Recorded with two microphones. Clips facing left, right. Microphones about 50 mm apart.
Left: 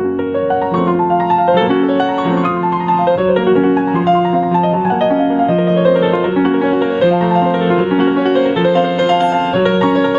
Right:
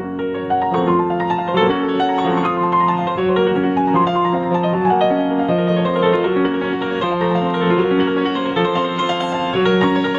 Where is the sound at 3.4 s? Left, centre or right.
Centre.